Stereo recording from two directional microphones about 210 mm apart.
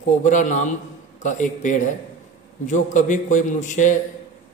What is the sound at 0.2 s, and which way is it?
A man's voice, 35° left (ahead or behind).